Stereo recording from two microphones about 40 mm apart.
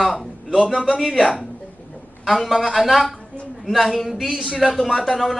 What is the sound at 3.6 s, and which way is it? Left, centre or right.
Speech, centre.